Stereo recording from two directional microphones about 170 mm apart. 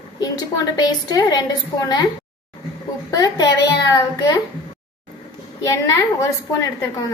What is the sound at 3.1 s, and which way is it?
A woman's voice, 20° left (ahead or behind).